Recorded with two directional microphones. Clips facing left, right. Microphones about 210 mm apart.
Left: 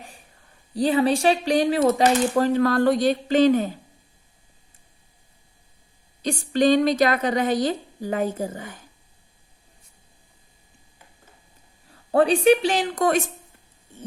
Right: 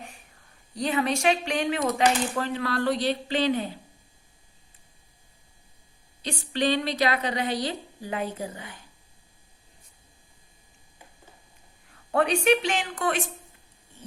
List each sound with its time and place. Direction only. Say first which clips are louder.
0.7 s speech: left 6 dB; 35° left (ahead or behind)
6.2 s a woman's voice: left 7 dB; 45° left (ahead or behind)
11.9 s a woman's voice: left 5 dB; 30° left (ahead or behind)